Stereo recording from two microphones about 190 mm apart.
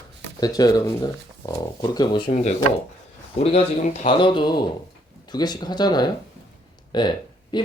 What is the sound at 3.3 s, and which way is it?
Speech, 30° left (ahead or behind).